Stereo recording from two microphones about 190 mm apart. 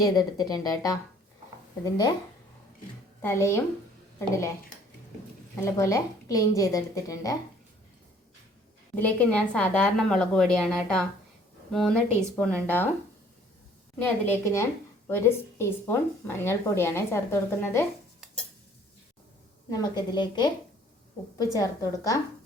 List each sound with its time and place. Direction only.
0.0 s speech: 20° left (ahead or behind)
3.2 s a woman's voice: 15° left (ahead or behind)
5.5 s a woman's voice: 15° left (ahead or behind)
9.0 s a woman's voice: 10° left (ahead or behind)
14.0 s a woman's voice: 10° left (ahead or behind)
19.7 s speech: 20° left (ahead or behind)
21.5 s a woman's voice: 15° left (ahead or behind)